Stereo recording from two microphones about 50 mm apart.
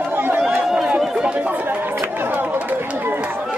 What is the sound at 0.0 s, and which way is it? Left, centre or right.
Chatter, right.